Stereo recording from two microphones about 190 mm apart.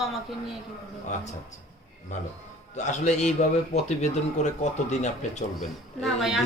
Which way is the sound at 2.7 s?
40° left (ahead or behind).